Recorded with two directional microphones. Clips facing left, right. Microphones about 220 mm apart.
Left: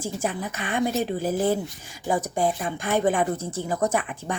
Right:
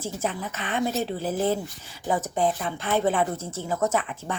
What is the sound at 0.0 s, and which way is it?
Speech, 15° left (ahead or behind).